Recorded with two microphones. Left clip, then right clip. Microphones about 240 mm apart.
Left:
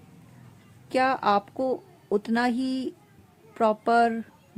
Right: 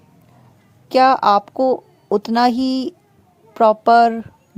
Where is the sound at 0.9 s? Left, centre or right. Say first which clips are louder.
Right 10 dB; right.